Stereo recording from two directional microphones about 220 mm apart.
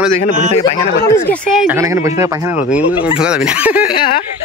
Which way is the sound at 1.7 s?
15° right (ahead or behind).